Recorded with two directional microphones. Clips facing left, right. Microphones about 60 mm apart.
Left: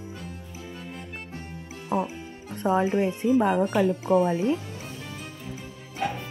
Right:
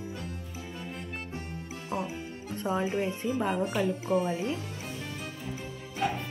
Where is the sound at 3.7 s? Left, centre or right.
Left.